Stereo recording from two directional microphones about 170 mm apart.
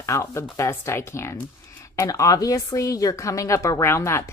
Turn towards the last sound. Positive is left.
turn(degrees=15)  # may be behind; listen again after turning